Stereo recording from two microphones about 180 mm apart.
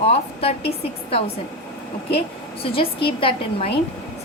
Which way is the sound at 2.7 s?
30° left (ahead or behind).